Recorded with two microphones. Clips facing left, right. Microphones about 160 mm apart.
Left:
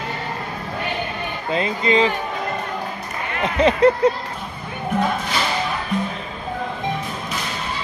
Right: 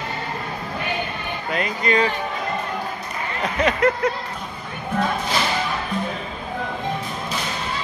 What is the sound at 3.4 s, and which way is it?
Speech, 30° left (ahead or behind).